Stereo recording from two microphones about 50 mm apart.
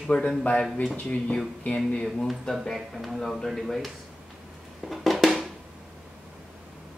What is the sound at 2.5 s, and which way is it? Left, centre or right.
Speech, centre.